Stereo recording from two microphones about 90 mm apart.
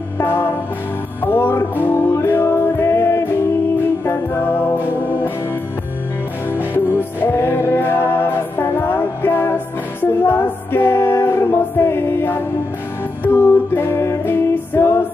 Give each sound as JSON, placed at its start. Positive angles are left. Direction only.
{"t": 0.2, "sound": "music", "side_deg": 25}
{"t": 6.7, "sound": "music", "side_deg": 25}